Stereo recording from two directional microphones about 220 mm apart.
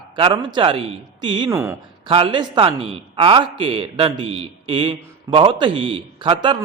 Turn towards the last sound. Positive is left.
turn(degrees=-25)  # may be behind; listen again after turning